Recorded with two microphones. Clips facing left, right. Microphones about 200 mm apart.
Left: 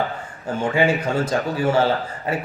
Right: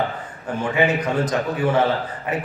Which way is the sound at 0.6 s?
25° left (ahead or behind).